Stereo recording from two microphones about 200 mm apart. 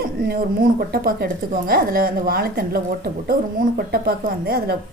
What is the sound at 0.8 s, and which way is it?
A woman's voice, 50° right (ahead or behind).